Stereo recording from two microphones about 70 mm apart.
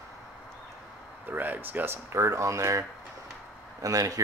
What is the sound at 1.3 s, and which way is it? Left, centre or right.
Speech, right.